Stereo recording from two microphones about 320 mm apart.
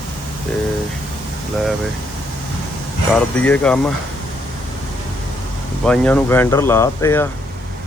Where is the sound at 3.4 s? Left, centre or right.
Centre.